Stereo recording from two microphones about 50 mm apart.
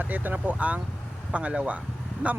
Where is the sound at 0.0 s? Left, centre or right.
Right.